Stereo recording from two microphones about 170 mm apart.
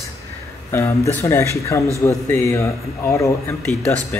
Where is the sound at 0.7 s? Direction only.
15° left (ahead or behind).